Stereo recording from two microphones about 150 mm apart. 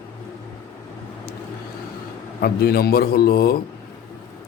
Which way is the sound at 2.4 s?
90° left.